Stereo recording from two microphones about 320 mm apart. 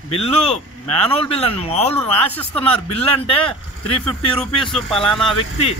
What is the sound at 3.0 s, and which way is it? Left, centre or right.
Speech, centre.